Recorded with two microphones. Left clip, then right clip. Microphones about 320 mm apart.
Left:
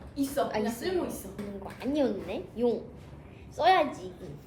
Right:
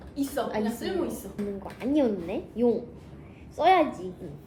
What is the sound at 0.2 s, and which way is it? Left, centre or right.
A woman's voice, centre.